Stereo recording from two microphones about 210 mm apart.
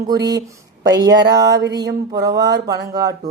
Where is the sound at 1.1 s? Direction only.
20° right (ahead or behind).